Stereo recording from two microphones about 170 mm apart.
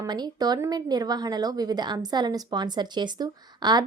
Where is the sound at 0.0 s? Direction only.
25° right (ahead or behind).